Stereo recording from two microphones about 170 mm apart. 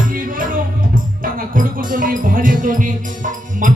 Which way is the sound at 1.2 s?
55° right (ahead or behind).